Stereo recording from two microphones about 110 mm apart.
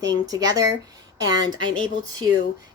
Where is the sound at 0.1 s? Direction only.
35° right (ahead or behind).